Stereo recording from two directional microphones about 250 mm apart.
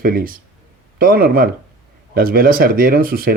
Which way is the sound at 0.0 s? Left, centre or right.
Right.